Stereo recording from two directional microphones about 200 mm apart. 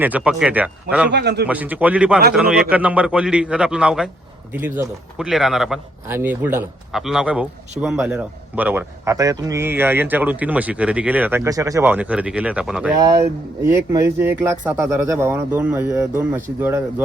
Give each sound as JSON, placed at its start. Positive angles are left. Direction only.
{"t": 0.0, "sound": "a man's voice", "side_deg": -5}
{"t": 1.1, "sound": "speech", "side_deg": -55}
{"t": 1.5, "sound": "a man's voice", "side_deg": -10}